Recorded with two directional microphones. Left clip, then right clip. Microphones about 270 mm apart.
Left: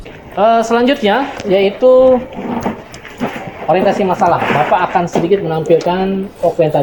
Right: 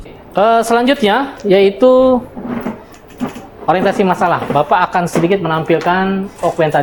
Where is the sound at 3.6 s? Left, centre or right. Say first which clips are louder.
Even; right.